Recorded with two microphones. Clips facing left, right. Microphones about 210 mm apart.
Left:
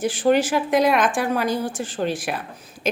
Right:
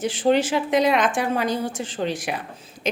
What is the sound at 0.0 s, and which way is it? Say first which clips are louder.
A woman's voice: left 1 dB; 25° right (ahead or behind).